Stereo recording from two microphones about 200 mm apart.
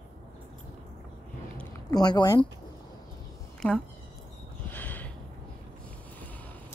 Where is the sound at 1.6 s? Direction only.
20° left (ahead or behind).